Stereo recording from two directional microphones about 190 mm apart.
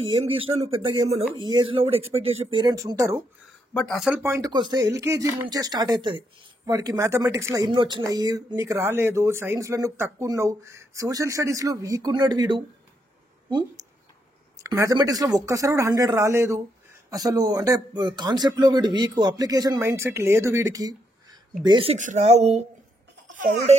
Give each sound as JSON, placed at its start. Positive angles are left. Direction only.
{"t": 0.2, "sound": "speech", "side_deg": -30}
{"t": 3.7, "sound": "speech", "side_deg": 0}
{"t": 4.2, "sound": "speech", "side_deg": -15}
{"t": 21.6, "sound": "speech", "side_deg": -30}